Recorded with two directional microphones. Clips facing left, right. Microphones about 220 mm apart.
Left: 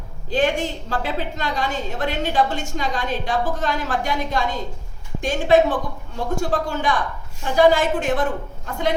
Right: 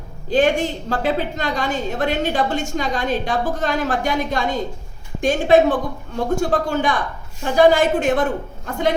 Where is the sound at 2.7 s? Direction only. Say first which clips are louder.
Right 3 dB; 50° right (ahead or behind).